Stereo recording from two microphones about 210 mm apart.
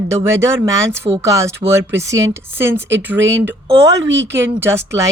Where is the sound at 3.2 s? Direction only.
65° right (ahead or behind).